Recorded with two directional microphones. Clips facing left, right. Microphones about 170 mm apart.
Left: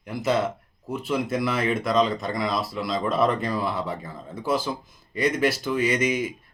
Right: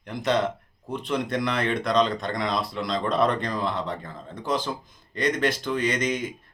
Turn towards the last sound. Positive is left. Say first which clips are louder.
# left 2 dB
turn(degrees=10)  # may be behind; listen again after turning